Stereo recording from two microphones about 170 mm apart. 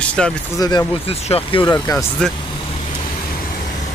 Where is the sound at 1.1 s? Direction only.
35° left (ahead or behind).